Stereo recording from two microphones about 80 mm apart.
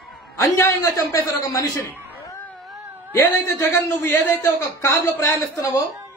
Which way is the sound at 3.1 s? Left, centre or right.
Left.